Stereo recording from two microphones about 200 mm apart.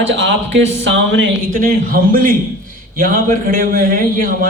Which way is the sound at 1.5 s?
45° right (ahead or behind).